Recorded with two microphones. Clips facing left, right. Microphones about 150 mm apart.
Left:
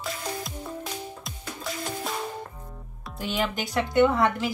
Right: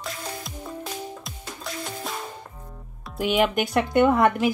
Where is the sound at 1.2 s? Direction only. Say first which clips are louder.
Left 1 dB; centre (ahead or behind).